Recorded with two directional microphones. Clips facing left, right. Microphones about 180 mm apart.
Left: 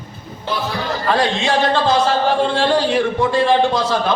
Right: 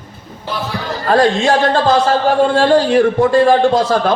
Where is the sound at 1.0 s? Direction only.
45° right (ahead or behind).